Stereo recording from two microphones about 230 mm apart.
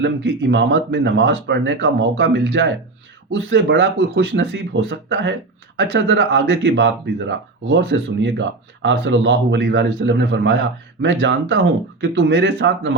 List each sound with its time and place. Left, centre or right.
0.0 s speech: right